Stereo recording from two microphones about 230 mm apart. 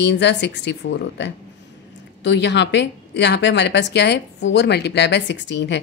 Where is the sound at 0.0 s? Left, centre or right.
Left.